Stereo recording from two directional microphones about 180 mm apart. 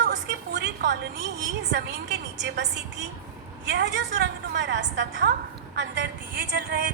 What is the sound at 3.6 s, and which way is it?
A woman's voice, 70° right (ahead or behind).